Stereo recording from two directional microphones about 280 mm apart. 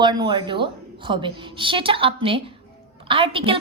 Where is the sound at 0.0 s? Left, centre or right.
Centre.